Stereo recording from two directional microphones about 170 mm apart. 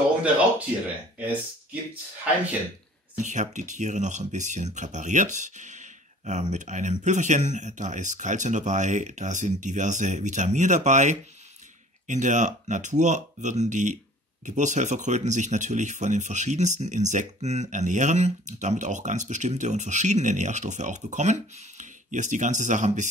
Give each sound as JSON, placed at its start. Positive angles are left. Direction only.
{"t": 0.2, "sound": "speech", "side_deg": -10}
{"t": 3.2, "sound": "speech", "side_deg": -45}